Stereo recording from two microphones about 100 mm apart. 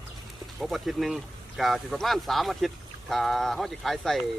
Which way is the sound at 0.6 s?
Centre (ahead or behind).